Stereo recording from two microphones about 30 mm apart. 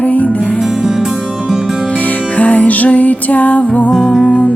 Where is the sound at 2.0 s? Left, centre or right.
Left.